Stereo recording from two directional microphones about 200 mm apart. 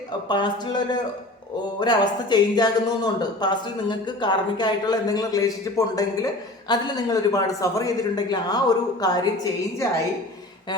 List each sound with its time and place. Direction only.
0.3 s speech: 20° left (ahead or behind)